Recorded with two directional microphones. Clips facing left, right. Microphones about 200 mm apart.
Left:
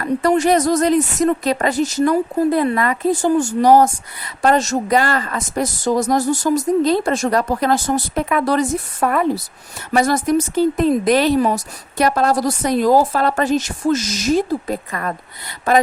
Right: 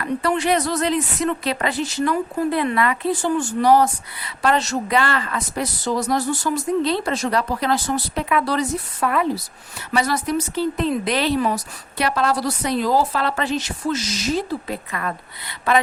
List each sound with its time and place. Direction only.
0.0 s speech: 40° left (ahead or behind)